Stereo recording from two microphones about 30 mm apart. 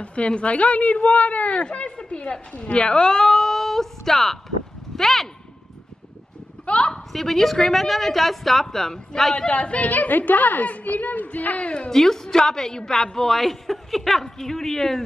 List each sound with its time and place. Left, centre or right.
0.0 s a woman's voice: left
1.6 s a woman's voice: left; by 4.4 s centre
4.9 s a sound: centre
6.6 s a sound: left
7.1 s a woman's voice: centre
8.6 s a woman's voice: centre
9.5 s a woman's voice: left
9.8 s a woman's voice: left
11.5 s a woman's voice: left
11.9 s a woman's voice: centre